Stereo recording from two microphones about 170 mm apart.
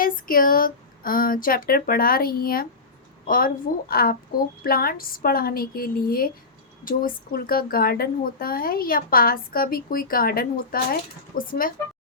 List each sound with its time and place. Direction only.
0.0 s speech: 55° left (ahead or behind)